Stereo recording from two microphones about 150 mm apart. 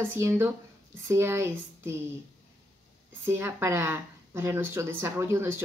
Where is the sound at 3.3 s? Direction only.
15° right (ahead or behind).